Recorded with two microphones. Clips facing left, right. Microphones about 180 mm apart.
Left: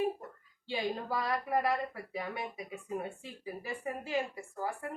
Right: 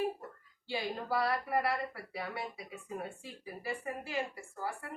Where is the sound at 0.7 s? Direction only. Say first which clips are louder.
Left 1 dB; 15° left (ahead or behind).